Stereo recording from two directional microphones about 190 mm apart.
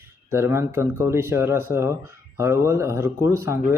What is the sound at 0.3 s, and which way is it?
Speech, 15° right (ahead or behind).